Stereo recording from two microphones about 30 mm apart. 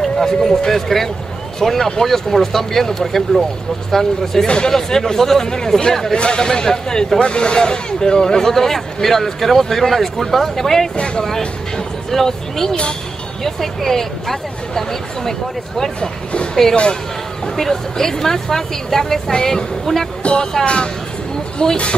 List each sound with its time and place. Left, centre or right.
0.0 s speech: centre
6.1 s speech: left
6.4 s a man's voice: left
12.1 s speech: centre
17.6 s speech: centre
20.6 s a man's voice: left